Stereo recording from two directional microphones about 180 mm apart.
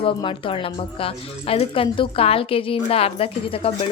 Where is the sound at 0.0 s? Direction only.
30° left (ahead or behind).